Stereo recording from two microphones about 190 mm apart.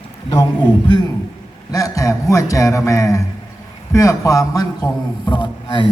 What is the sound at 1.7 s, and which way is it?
A man's voice, 15° left (ahead or behind).